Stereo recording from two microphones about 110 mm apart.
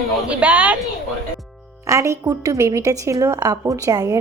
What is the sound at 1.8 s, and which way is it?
A woman's voice, 30° right (ahead or behind).